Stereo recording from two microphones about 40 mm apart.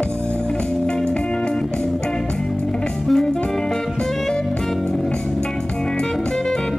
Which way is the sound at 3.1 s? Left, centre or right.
Centre.